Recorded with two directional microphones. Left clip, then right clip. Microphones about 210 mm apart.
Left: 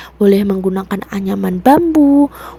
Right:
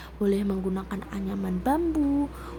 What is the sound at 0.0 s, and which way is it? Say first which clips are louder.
A woman's voice: left 15 dB; 40° left (ahead or behind).